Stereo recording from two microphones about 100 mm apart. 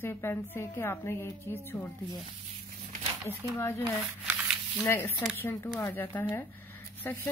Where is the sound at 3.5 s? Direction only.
30° left (ahead or behind).